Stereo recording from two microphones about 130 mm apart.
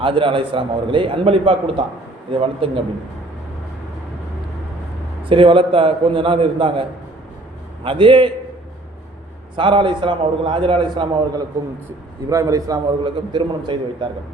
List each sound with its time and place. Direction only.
0.0 s a man's voice: 40° right (ahead or behind)
5.3 s a man's voice: 45° right (ahead or behind)
7.9 s a man's voice: 40° right (ahead or behind)
9.6 s a man's voice: 40° right (ahead or behind)
13.1 s a man's voice: 40° right (ahead or behind)